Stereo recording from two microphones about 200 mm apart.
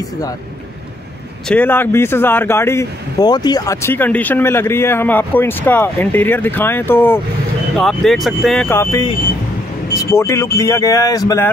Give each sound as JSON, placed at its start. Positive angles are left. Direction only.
{"t": 1.5, "sound": "speech", "side_deg": 10}
{"t": 10.1, "sound": "speech", "side_deg": 15}